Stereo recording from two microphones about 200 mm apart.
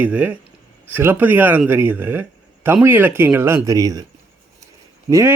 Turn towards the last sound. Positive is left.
turn(degrees=-15)  # may be behind; listen again after turning